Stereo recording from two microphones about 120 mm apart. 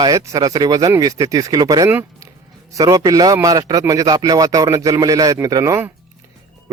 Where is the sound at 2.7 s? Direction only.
30° right (ahead or behind).